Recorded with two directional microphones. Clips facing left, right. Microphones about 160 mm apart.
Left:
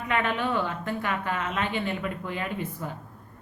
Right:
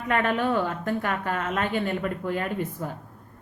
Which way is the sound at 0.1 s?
45° right (ahead or behind).